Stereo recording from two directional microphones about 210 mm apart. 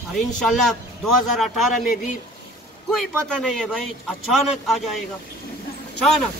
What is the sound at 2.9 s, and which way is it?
A man's voice, centre (ahead or behind).